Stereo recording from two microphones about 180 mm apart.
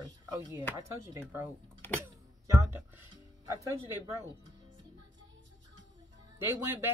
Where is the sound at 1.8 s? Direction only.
10° left (ahead or behind).